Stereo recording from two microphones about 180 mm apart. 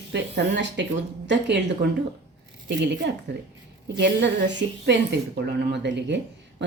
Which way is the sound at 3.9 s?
75° right (ahead or behind).